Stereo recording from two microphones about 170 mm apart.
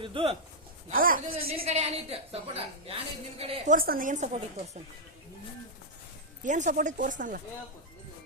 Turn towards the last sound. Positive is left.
turn(degrees=-50)  # may be behind; listen again after turning